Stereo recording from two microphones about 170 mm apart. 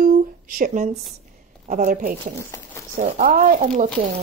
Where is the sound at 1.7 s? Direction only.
50° right (ahead or behind).